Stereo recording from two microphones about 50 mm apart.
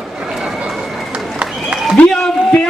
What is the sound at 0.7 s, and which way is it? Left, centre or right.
Run, centre.